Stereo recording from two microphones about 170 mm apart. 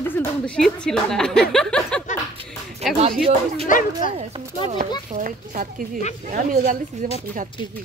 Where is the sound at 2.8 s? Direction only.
40° right (ahead or behind).